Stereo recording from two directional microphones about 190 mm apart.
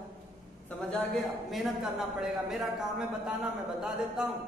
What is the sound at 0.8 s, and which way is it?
A man's voice, 5° left (ahead or behind).